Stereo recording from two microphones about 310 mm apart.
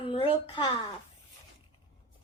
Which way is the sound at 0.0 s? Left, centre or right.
Centre.